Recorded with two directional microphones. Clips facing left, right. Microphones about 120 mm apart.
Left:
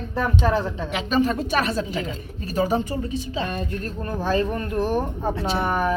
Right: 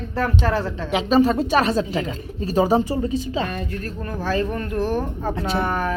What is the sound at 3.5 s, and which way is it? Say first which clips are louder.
Speech: even; 25° left (ahead or behind).